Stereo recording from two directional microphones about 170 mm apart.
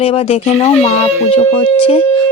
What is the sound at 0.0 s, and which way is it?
Speech, 35° left (ahead or behind).